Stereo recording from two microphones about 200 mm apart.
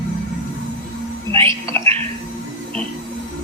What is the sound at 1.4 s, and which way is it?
Music, 15° left (ahead or behind).